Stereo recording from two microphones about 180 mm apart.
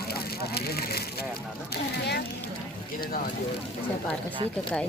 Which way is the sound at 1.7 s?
65° left (ahead or behind).